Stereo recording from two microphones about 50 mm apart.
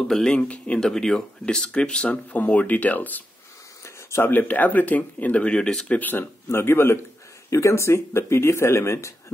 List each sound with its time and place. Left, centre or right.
0.3 s speech: left
0.7 s speech: centre
2.0 s speech: left
3.8 s a sound: left
4.3 s speech: left
5.6 s speech: centre
5.9 s speech: left
6.5 s a man's voice: left
7.4 s speech: left